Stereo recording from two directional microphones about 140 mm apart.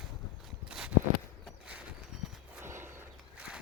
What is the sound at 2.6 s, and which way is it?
Horse, 15° right (ahead or behind).